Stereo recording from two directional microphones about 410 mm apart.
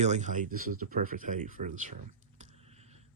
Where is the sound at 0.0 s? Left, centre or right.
Centre.